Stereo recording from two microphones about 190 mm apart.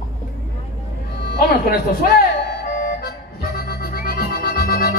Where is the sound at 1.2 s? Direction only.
55° left (ahead or behind).